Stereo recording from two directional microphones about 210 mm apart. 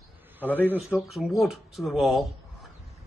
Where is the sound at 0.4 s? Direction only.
10° right (ahead or behind).